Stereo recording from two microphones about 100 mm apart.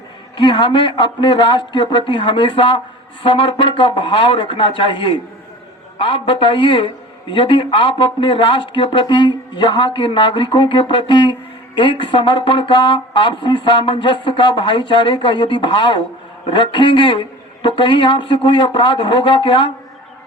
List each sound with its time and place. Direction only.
0.3 s a man's voice: 55° left (ahead or behind)